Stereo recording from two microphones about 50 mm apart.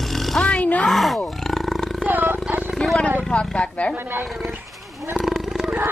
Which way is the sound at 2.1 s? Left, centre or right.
Right.